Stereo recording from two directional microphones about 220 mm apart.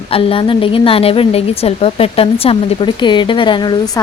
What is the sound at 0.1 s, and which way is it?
A woman's voice, 25° left (ahead or behind).